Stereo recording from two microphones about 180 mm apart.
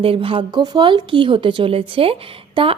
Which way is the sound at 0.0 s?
30° right (ahead or behind).